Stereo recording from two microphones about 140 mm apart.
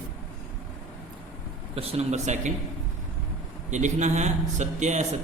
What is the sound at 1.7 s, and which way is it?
Speech, 45° right (ahead or behind).